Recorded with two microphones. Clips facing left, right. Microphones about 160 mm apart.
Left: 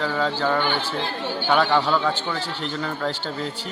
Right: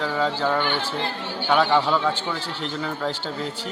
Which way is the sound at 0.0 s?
Centre (ahead or behind).